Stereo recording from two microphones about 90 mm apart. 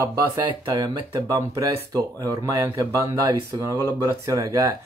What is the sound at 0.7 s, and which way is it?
Speech, 35° right (ahead or behind).